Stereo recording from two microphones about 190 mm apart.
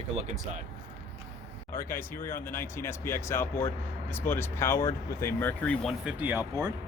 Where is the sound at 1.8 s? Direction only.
10° left (ahead or behind).